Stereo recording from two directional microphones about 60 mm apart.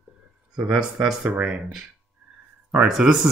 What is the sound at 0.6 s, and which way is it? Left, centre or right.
Speech, centre.